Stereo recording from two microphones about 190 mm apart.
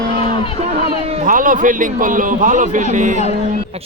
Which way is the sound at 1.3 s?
45° right (ahead or behind).